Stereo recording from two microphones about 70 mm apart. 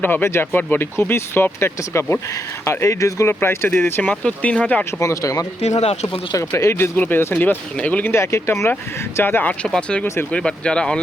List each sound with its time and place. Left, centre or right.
0.0 s speech: left
3.4 s speech: left
4.1 s speech: centre
4.9 s speech: left
6.6 s speech: left
6.9 s speech: left
8.1 s speech: left
9.1 s speech: left
9.6 s speech: centre